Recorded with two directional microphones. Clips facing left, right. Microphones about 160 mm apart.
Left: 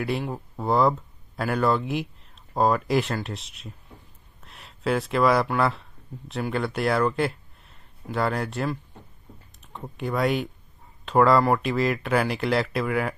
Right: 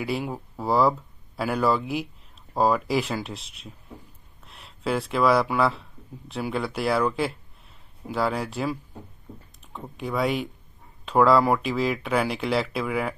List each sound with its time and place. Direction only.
0.0 s speech: centre (ahead or behind)